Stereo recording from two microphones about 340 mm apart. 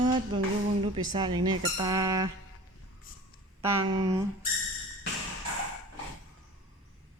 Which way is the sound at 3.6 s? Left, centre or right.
Centre.